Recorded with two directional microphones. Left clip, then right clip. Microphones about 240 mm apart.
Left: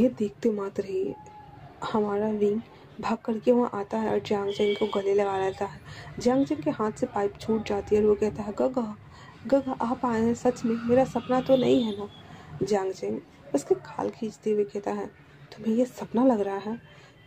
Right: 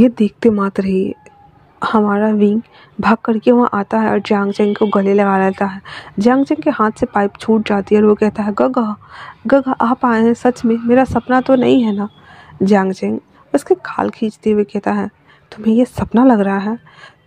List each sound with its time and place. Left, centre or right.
0.0 s speech: right